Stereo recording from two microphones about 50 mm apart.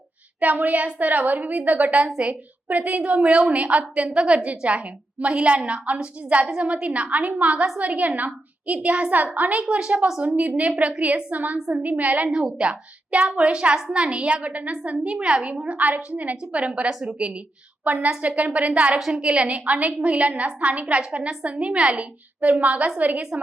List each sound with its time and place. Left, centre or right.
0.3 s a woman's voice: right
12.5 s a woman's voice: right